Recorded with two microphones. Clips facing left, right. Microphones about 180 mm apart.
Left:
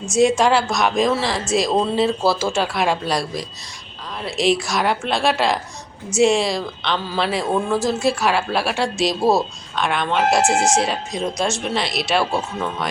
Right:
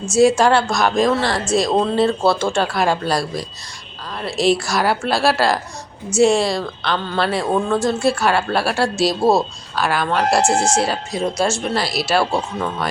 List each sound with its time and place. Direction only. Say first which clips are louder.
0.1 s speech: right 2 dB; 5° right (ahead or behind)